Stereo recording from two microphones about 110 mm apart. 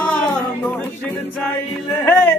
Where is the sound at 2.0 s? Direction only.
20° left (ahead or behind).